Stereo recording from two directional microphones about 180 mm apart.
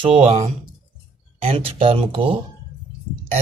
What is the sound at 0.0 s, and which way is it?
Speech, 30° right (ahead or behind).